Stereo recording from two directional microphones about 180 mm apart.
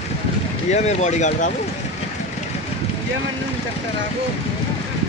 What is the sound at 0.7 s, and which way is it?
Speech, 40° left (ahead or behind).